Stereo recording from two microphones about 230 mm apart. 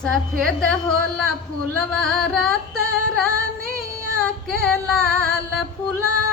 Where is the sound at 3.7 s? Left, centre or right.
Centre.